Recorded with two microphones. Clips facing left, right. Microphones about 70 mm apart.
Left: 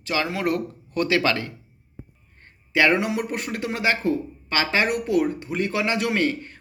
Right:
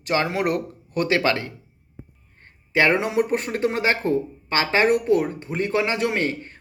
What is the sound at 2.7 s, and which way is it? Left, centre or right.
Speech, right.